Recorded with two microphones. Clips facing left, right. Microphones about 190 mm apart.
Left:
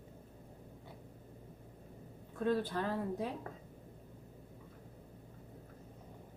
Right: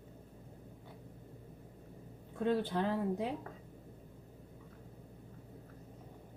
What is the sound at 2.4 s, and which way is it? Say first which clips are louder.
Speech: right 1 dB; 20° right (ahead or behind).